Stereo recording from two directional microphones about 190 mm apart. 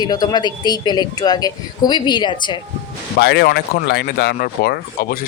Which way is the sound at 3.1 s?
60° left (ahead or behind).